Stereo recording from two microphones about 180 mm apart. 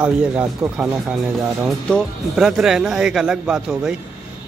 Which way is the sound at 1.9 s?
Centre (ahead or behind).